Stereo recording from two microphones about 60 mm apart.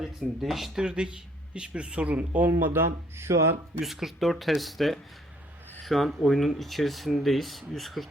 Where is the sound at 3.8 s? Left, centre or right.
Centre.